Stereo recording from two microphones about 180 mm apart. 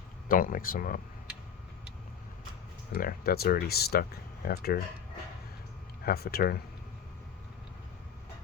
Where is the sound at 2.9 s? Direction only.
55° left (ahead or behind).